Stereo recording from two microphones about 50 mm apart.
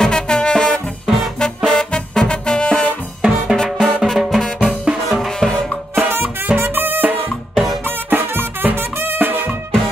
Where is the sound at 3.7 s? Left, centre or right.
Centre.